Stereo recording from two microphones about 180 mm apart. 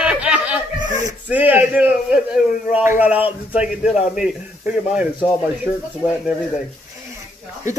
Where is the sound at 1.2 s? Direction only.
10° right (ahead or behind).